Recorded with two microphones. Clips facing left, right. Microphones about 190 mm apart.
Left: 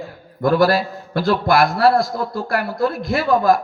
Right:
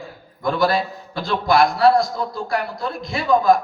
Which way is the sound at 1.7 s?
55° left (ahead or behind).